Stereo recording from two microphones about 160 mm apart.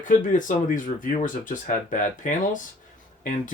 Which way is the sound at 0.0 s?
55° left (ahead or behind).